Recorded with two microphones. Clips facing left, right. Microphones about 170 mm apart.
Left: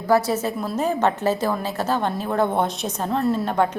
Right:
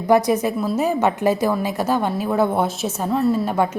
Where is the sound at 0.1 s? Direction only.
15° right (ahead or behind).